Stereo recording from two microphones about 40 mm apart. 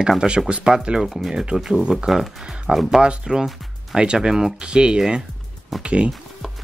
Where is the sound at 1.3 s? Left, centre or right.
Right; by 3.0 s centre.